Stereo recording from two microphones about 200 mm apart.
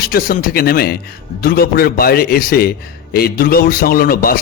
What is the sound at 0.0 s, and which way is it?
A man's voice, 45° left (ahead or behind).